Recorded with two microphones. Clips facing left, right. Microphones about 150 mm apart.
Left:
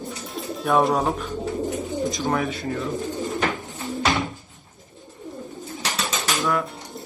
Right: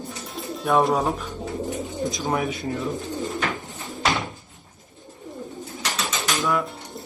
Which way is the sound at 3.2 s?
20° left (ahead or behind).